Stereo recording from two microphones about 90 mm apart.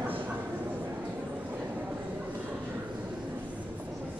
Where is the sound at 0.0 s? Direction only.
20° right (ahead or behind).